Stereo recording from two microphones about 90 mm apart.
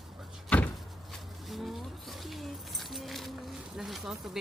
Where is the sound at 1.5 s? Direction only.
Centre (ahead or behind).